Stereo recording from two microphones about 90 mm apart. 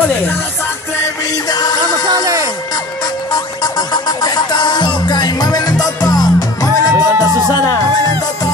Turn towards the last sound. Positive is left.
turn(degrees=40)  # may be behind; listen again after turning